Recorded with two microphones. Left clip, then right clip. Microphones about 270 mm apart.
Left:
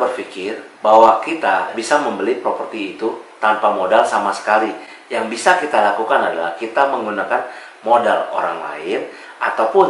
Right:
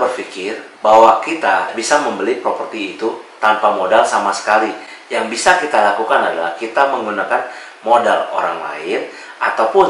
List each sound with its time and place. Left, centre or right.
0.0 s a sound: centre
0.8 s speech: left
1.2 s speech: centre